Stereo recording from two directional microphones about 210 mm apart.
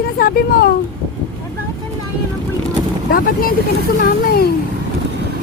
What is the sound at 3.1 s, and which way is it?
Speech, 45° left (ahead or behind).